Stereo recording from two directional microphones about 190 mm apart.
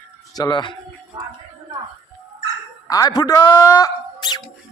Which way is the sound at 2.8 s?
20° left (ahead or behind).